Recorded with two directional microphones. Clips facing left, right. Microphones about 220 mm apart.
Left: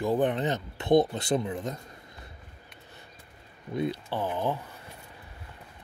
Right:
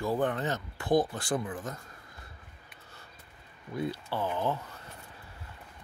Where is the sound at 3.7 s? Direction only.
20° left (ahead or behind).